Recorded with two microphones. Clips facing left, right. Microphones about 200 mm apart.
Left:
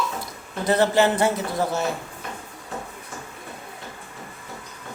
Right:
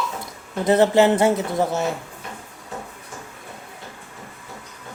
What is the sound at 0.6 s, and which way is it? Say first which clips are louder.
Speech: right 4 dB; 25° right (ahead or behind).